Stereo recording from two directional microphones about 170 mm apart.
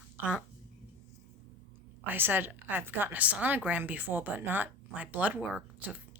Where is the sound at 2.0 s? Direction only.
10° right (ahead or behind).